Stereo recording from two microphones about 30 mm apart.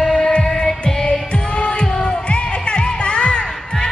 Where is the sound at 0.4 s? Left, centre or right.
Left.